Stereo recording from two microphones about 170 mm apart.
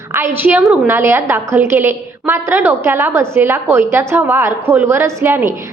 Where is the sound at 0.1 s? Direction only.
15° right (ahead or behind).